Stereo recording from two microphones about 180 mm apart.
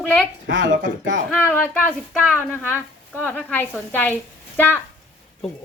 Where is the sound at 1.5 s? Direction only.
10° left (ahead or behind).